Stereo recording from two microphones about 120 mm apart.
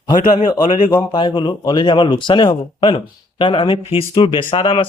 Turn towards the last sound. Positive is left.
turn(degrees=50)  # may be behind; listen again after turning